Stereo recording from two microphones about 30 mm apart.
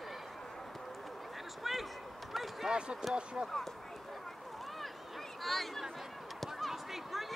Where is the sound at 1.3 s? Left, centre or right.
Centre.